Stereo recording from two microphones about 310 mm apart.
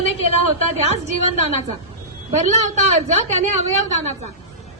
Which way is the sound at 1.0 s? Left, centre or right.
Right.